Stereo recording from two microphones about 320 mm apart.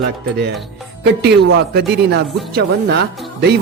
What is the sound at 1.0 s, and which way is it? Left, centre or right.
Speech, right.